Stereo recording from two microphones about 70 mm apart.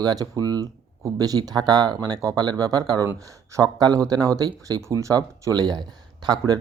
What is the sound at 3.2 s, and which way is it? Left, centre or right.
Speech, right.